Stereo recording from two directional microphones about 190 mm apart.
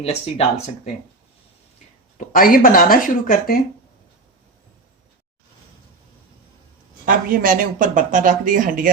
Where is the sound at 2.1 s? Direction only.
45° left (ahead or behind).